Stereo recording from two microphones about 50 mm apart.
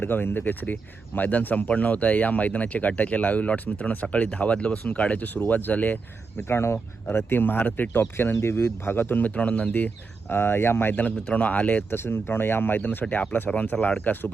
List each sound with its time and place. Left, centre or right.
0.0 s speech: left
6.5 s speech: left
8.8 s speech: left
10.3 s speech: left
10.9 s speech: left
11.9 s speech: left
12.8 s speech: left